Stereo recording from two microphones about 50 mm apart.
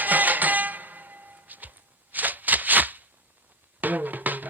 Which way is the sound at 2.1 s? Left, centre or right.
Right.